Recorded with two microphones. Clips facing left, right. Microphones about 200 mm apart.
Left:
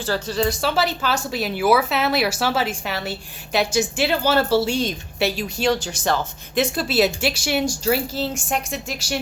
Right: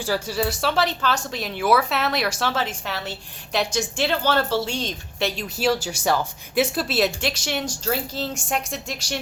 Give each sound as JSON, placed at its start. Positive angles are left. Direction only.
{"t": 0.0, "sound": "speech", "side_deg": -10}